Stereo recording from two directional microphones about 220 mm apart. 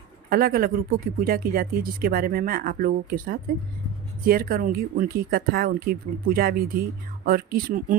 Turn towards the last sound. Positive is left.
turn(degrees=-40)  # may be behind; listen again after turning